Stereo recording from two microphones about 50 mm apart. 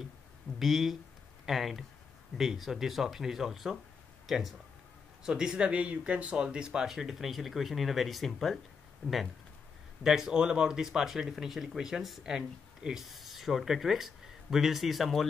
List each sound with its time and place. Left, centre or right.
0.6 s speech: centre
6.9 s speech: centre